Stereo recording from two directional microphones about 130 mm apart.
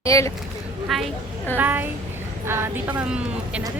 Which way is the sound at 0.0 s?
25° left (ahead or behind).